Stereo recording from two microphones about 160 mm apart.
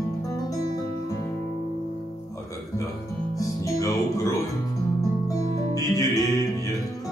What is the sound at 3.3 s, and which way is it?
Music, 20° left (ahead or behind).